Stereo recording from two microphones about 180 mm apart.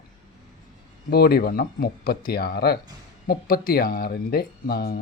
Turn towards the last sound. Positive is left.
turn(degrees=60)  # may be behind; listen again after turning